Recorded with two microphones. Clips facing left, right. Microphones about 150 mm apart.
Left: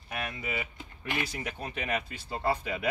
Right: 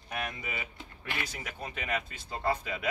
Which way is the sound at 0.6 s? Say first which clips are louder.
Left 3 dB; 15° left (ahead or behind).